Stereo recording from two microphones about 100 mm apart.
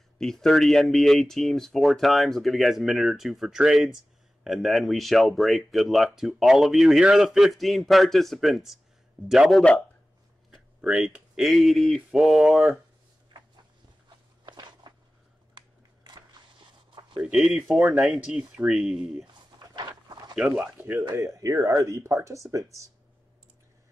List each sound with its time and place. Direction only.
0.2 s speech: 5° left (ahead or behind)
9.6 s a man's voice: 10° left (ahead or behind)
10.8 s speech: 10° right (ahead or behind)
14.4 s walk: 50° right (ahead or behind)
15.5 s a sound: 45° right (ahead or behind)
17.2 s speech: 5° right (ahead or behind)
17.8 s speech: 20° right (ahead or behind)
18.1 s speech: 5° right (ahead or behind)
19.7 s a sound: 45° right (ahead or behind)
20.3 s speech: 10° right (ahead or behind)
20.6 s speech: 20° right (ahead or behind)
21.1 s speech: 30° right (ahead or behind)